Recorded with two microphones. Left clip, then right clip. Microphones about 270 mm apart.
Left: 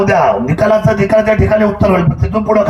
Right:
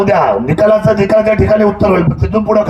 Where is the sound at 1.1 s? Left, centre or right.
Centre.